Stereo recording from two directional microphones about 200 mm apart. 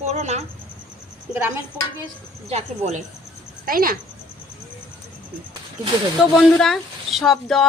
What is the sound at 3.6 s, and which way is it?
Speech, 45° right (ahead or behind).